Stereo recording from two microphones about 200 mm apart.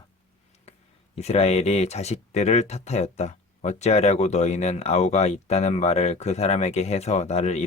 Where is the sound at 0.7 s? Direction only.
30° left (ahead or behind).